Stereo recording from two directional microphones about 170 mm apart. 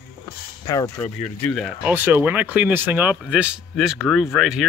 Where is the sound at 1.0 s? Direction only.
5° left (ahead or behind).